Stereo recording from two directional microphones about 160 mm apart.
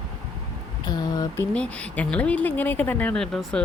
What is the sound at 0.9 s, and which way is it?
Speech, 25° left (ahead or behind).